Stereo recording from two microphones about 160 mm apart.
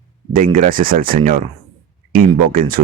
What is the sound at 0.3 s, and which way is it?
Speech, 60° right (ahead or behind).